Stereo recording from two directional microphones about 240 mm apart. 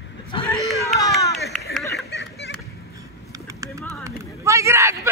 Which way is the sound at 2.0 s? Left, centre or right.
Left.